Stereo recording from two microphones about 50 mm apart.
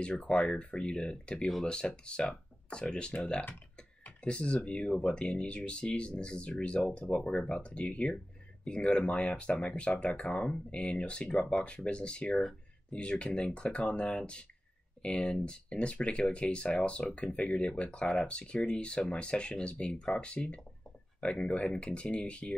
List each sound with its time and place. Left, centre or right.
0.0 s speech: centre